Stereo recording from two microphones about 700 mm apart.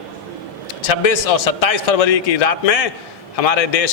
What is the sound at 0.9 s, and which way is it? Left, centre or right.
A man's voice, left.